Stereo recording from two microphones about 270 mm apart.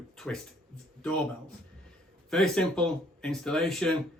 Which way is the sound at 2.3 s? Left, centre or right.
Centre.